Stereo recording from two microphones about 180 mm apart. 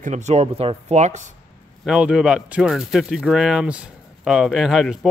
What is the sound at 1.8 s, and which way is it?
Speech, 5° right (ahead or behind).